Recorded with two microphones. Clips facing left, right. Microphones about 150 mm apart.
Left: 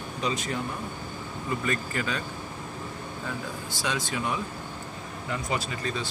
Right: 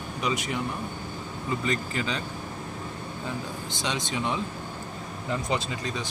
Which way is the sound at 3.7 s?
20° right (ahead or behind).